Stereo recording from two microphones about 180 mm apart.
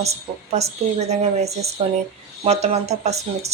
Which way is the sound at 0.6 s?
40° right (ahead or behind).